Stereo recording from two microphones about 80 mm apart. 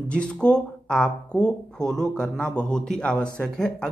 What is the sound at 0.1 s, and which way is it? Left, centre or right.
Speech, centre.